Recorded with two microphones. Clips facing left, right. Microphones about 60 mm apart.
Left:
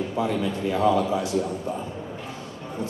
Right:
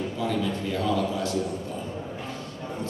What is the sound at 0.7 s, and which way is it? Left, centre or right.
Speech, left.